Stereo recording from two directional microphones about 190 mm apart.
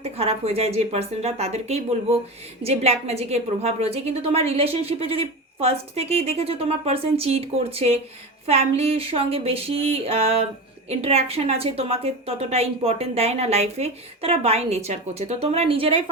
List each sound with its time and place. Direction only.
0.0 s speech: 30° right (ahead or behind)